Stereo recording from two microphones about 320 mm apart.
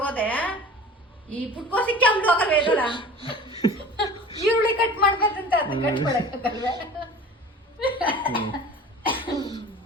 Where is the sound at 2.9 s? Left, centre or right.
Centre.